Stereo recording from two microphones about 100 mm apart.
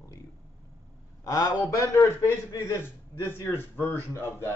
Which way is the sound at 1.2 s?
40° left (ahead or behind).